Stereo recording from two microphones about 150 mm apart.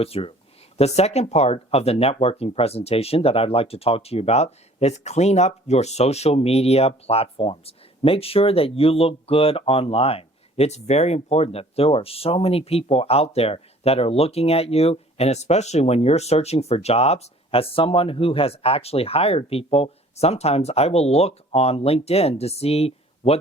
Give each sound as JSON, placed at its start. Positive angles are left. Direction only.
{"t": 0.0, "sound": "speech", "side_deg": 40}